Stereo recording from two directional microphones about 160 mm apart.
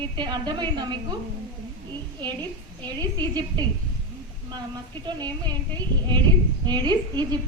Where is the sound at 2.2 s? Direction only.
25° right (ahead or behind).